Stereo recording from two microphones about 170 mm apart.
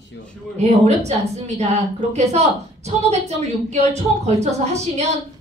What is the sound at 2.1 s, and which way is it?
Speech, 40° right (ahead or behind).